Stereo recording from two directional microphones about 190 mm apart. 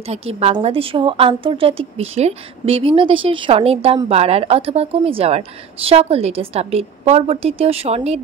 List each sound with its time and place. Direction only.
0.1 s a woman's voice: 35° right (ahead or behind)